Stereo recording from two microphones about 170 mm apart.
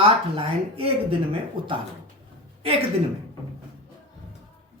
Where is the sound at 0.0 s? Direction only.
35° right (ahead or behind).